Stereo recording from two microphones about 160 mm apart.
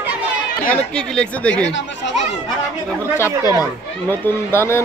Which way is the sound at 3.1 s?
15° left (ahead or behind).